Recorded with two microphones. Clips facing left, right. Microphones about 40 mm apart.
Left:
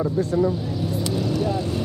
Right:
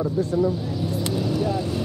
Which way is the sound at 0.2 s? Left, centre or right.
Left.